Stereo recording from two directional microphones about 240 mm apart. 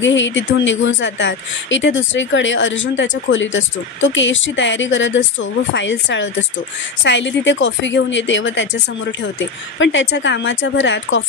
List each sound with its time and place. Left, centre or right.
0.0 s speech: left